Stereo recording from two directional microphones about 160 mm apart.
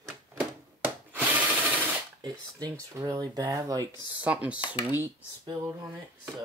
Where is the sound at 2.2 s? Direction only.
25° right (ahead or behind).